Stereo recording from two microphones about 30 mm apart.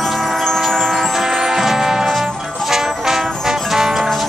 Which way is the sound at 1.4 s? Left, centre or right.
Centre.